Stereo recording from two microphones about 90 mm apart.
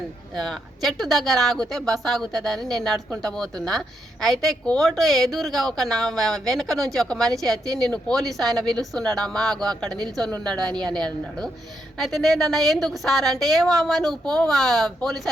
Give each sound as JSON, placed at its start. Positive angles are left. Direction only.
{"t": 0.3, "sound": "a woman's voice", "side_deg": 5}